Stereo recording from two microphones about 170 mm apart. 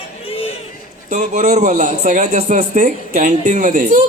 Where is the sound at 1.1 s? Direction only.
45° right (ahead or behind).